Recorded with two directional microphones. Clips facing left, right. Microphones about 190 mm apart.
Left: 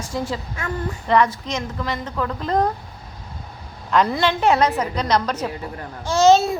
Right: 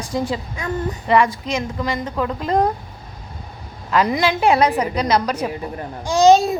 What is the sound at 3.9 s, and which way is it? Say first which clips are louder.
A woman's voice: right 1 dB; 5° right (ahead or behind).